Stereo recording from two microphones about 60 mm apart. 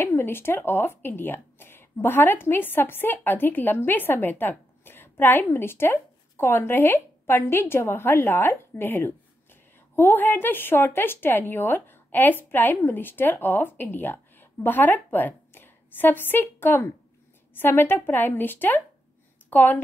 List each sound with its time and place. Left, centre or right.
0.0 s a woman's voice: left